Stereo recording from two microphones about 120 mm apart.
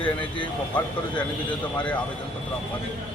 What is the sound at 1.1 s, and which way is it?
Speech, 40° left (ahead or behind).